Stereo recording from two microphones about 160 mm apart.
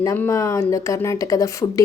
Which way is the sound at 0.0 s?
15° left (ahead or behind).